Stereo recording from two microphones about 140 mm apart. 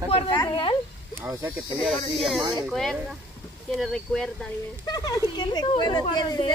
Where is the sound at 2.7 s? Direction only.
Centre (ahead or behind).